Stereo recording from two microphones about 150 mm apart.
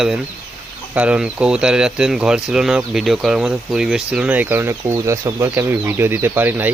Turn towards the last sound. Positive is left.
turn(degrees=-10)  # may be behind; listen again after turning